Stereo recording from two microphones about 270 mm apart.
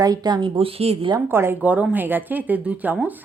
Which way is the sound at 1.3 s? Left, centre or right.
Centre.